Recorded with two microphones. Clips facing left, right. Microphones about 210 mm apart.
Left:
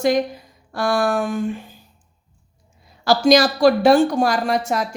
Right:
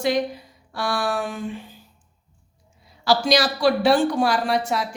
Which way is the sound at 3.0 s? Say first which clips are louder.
Left 5 dB; 45° left (ahead or behind).